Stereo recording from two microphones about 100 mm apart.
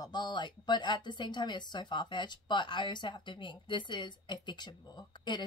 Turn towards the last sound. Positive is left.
turn(degrees=45)  # may be behind; listen again after turning